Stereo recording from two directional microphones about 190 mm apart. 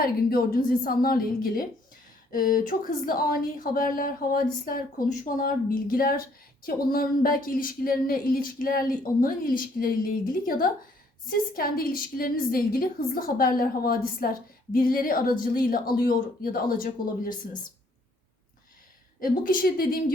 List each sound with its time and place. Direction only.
0.0 s a woman's voice: 50° left (ahead or behind)
17.3 s speech: 20° left (ahead or behind)
19.2 s a woman's voice: 45° left (ahead or behind)